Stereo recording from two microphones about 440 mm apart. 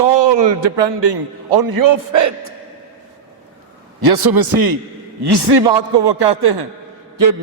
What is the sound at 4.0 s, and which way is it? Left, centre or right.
A man's voice, right.